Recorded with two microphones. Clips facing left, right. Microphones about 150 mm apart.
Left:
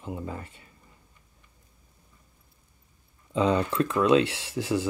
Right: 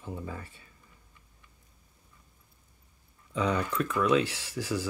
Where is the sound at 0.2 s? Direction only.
20° left (ahead or behind).